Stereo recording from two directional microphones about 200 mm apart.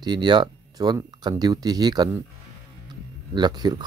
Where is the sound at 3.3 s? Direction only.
20° right (ahead or behind).